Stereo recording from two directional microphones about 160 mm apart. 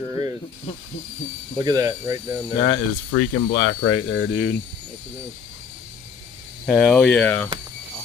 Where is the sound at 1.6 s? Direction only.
25° right (ahead or behind).